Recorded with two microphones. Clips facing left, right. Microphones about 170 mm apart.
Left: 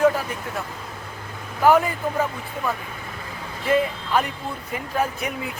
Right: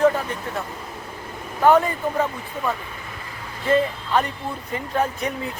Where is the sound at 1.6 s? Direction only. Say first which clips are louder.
Right 1 dB; 5° left (ahead or behind).